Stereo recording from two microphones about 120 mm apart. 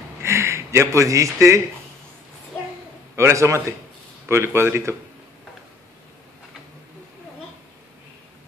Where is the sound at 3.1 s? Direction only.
25° right (ahead or behind).